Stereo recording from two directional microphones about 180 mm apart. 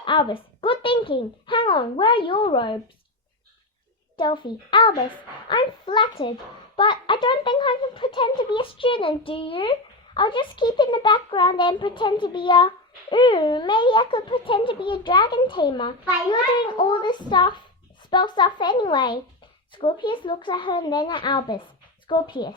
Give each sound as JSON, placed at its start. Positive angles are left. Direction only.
{"t": 0.0, "sound": "a child's voice", "side_deg": 25}
{"t": 4.2, "sound": "a child's voice", "side_deg": 25}